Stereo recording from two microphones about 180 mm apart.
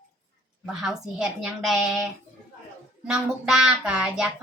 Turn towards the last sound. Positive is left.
turn(degrees=-5)  # may be behind; listen again after turning